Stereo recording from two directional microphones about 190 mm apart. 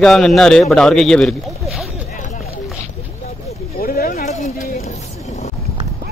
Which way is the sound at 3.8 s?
50° left (ahead or behind).